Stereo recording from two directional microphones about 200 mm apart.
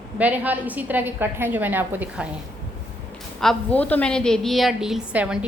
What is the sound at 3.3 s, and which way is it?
A woman's voice, 5° left (ahead or behind).